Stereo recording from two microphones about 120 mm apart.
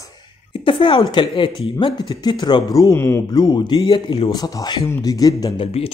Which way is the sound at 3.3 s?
35° left (ahead or behind).